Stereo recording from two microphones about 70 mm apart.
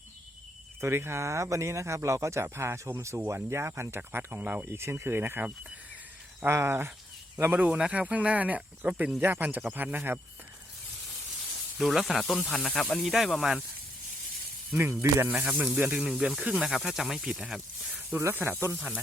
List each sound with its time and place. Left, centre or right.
0.8 s speech: right
4.7 s speech: right
6.5 s speech: right
11.8 s speech: centre
12.5 s speech: centre
14.8 s speech: right
15.4 s speech: centre
18.1 s speech: right